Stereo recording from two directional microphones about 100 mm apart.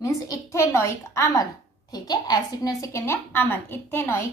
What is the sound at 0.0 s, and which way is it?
A woman's voice, 35° left (ahead or behind).